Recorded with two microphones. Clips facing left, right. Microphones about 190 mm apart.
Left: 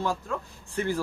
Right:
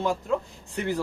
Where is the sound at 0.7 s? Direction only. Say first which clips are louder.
Even; 20° right (ahead or behind).